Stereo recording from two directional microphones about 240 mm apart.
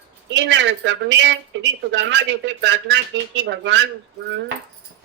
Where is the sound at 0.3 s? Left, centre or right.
Right.